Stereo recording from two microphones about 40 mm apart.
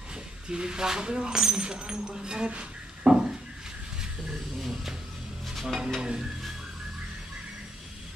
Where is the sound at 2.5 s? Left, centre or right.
Right.